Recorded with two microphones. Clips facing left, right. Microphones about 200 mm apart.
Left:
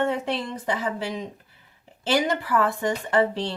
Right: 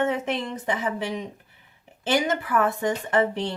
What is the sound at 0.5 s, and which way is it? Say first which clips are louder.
Speech: even; 20° right (ahead or behind).